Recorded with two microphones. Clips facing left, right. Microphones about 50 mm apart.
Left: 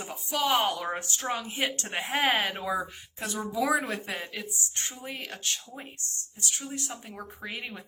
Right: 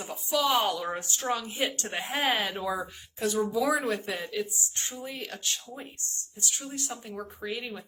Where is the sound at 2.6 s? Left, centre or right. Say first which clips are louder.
Left 1 dB; left.